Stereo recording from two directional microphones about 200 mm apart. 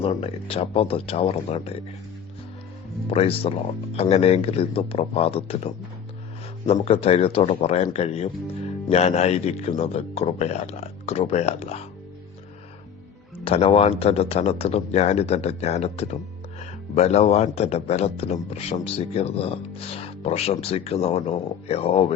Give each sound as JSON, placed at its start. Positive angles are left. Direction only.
{"t": 0.0, "sound": "speech", "side_deg": 30}
{"t": 3.1, "sound": "speech", "side_deg": 30}
{"t": 6.8, "sound": "speech", "side_deg": 30}
{"t": 13.4, "sound": "speech", "side_deg": 30}